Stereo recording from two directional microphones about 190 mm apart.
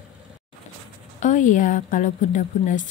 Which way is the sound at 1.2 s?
40° left (ahead or behind).